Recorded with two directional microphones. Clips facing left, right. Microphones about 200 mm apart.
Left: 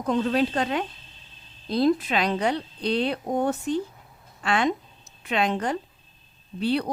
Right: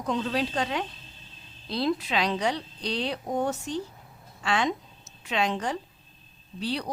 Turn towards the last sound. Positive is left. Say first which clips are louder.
# left 6 dB
turn(degrees=55)  # may be behind; listen again after turning